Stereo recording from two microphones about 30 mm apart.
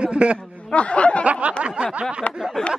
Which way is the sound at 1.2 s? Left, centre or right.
Right.